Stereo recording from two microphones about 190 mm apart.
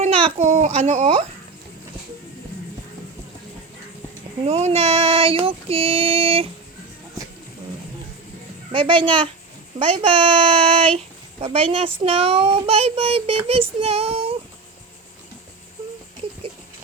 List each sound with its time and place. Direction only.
0.0 s speech: 30° right (ahead or behind)
4.4 s female singing: 30° right (ahead or behind)
8.7 s female singing: 25° right (ahead or behind)
10.9 s a child's voice: 30° right (ahead or behind)